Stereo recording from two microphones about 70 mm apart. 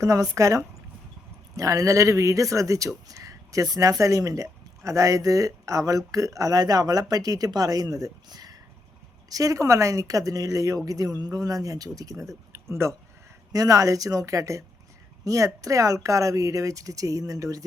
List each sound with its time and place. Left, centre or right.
0.0 s speech: right
9.3 s speech: right
13.5 s speech: right